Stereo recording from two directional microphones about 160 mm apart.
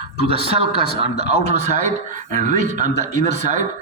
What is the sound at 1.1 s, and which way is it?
Speech, 90° left.